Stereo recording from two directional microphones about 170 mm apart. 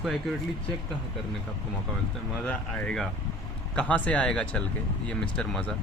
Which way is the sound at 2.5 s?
10° left (ahead or behind).